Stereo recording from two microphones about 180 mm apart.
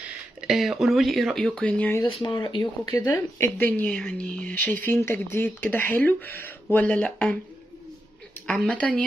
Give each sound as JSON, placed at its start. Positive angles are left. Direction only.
{"t": 0.0, "sound": "speech", "side_deg": -5}
{"t": 2.0, "sound": "speech", "side_deg": 25}
{"t": 8.5, "sound": "speech", "side_deg": 5}